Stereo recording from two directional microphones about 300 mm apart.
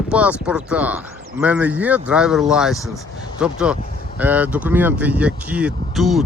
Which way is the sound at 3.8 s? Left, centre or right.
Left.